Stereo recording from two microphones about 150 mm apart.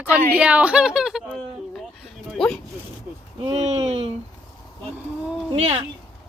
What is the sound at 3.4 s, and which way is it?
Speech, 45° right (ahead or behind).